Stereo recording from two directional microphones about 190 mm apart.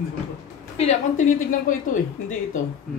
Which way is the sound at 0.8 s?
40° left (ahead or behind).